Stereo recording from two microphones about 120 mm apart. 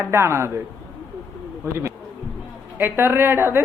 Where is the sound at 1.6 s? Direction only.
20° right (ahead or behind).